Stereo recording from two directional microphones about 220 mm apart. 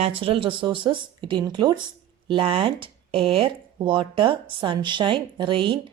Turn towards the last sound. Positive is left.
turn(degrees=-25)  # may be behind; listen again after turning